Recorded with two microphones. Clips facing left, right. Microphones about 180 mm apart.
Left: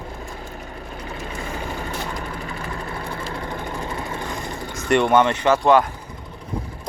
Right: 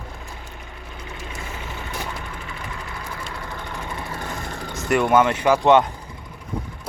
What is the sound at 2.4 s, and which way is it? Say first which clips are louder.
Ratchet: left 4 dB; 40° left (ahead or behind).